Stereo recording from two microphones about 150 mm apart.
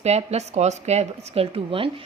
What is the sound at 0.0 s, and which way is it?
A woman's voice, 45° right (ahead or behind).